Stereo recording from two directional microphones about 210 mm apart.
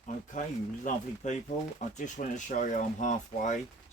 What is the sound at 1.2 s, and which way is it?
Speech, 35° left (ahead or behind).